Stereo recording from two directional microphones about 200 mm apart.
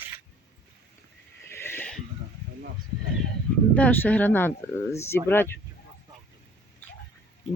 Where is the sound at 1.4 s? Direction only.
10° left (ahead or behind).